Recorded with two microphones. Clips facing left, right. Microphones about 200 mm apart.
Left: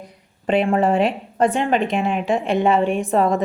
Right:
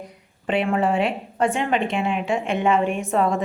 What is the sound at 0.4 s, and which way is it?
A woman's voice, 40° left (ahead or behind).